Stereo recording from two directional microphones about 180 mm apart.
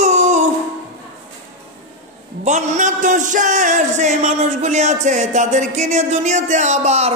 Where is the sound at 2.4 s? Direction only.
40° right (ahead or behind).